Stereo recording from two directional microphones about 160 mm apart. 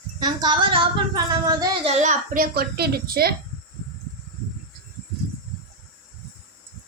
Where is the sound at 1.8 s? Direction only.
45° right (ahead or behind); by 3.3 s 75° right (ahead or behind).